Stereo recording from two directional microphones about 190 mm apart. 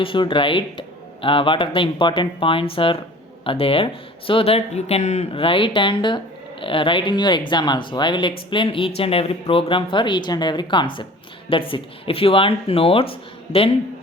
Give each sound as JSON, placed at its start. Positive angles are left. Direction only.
{"t": 0.0, "sound": "speech", "side_deg": 25}